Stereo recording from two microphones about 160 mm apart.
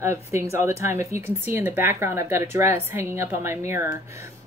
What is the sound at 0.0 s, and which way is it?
A woman's voice, 15° right (ahead or behind).